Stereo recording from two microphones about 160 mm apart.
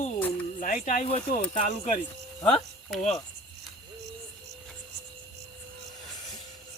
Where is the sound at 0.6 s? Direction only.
55° left (ahead or behind).